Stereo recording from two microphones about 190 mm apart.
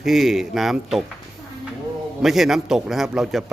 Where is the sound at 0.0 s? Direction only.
Centre (ahead or behind).